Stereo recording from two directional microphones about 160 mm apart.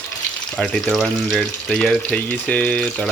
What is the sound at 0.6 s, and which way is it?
Speech, 5° left (ahead or behind).